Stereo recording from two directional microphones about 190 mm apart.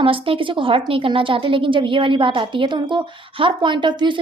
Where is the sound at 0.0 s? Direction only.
30° right (ahead or behind).